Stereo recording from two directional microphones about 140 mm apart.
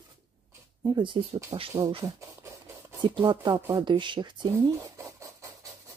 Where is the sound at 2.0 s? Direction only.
20° right (ahead or behind).